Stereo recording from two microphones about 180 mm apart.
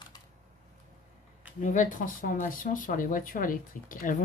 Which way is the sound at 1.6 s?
45° left (ahead or behind).